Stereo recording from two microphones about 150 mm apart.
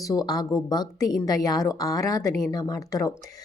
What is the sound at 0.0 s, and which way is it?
Speech, 25° left (ahead or behind).